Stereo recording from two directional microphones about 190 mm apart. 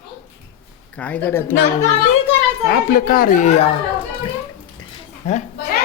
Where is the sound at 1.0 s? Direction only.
10° left (ahead or behind).